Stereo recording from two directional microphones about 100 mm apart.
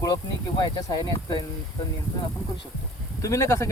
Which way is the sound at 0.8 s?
40° left (ahead or behind).